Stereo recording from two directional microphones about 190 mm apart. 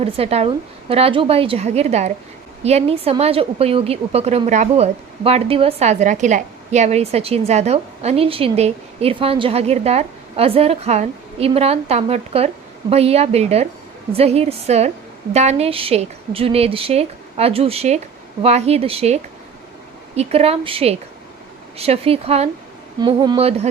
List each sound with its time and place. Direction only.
0.0 s a woman's voice: 30° right (ahead or behind)